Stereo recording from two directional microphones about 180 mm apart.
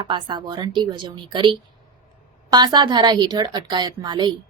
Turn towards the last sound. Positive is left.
turn(degrees=-25)  # may be behind; listen again after turning